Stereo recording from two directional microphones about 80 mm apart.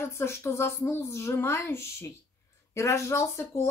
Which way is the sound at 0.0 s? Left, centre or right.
Left.